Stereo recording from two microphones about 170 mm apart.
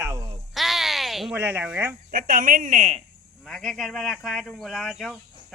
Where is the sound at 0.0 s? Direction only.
20° right (ahead or behind).